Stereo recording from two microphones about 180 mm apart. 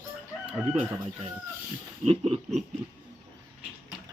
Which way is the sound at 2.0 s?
35° right (ahead or behind).